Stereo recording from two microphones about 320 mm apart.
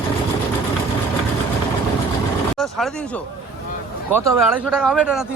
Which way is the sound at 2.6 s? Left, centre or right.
Centre.